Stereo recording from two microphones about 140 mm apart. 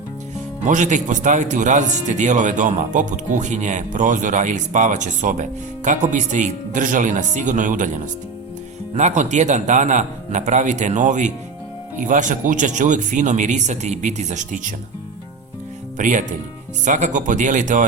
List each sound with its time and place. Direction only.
0.6 s speech: 65° right (ahead or behind)
9.0 s speech: 60° right (ahead or behind)
16.0 s speech: 65° right (ahead or behind)